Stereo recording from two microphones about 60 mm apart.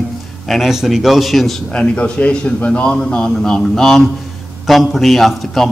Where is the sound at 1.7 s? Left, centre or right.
Centre.